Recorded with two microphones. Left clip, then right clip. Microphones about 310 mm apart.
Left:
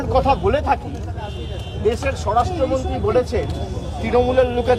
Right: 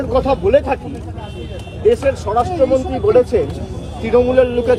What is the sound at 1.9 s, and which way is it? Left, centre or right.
A man's voice, centre.